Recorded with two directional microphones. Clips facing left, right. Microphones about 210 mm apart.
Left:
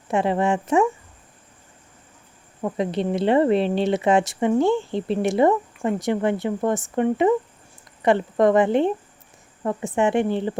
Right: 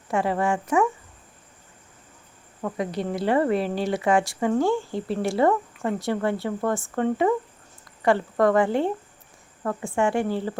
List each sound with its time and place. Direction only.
0.1 s speech: 20° left (ahead or behind)
2.6 s speech: 20° left (ahead or behind)